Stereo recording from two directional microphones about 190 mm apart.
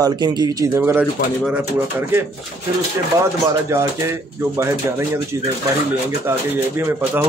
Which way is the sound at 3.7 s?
15° right (ahead or behind).